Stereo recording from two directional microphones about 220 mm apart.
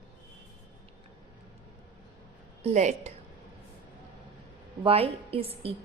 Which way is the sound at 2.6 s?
30° right (ahead or behind).